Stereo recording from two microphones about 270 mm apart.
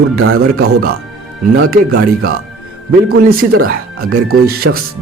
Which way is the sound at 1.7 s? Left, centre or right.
Right.